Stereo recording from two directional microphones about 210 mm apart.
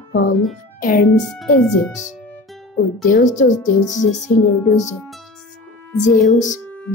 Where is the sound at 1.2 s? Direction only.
5° left (ahead or behind).